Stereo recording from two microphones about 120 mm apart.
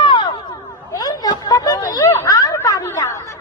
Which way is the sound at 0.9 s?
30° left (ahead or behind).